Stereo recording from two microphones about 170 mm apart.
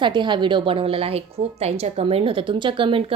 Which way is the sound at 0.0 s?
30° right (ahead or behind).